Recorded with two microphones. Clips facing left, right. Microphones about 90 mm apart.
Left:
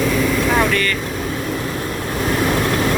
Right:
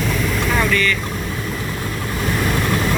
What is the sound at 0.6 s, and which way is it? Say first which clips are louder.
Speech: left 1 dB; 55° left (ahead or behind).